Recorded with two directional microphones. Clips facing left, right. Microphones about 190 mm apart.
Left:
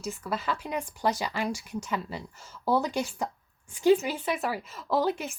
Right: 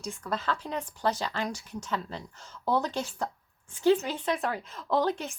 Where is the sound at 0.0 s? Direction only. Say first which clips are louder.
Left 1 dB; 5° left (ahead or behind).